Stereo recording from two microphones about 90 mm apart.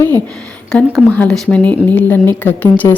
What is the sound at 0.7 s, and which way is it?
A woman's voice, 5° left (ahead or behind).